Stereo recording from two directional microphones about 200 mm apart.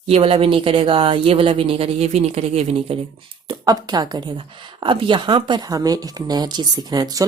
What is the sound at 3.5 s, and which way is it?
A woman's voice, 20° right (ahead or behind).